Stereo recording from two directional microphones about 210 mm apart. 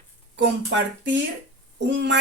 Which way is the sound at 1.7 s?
55° right (ahead or behind).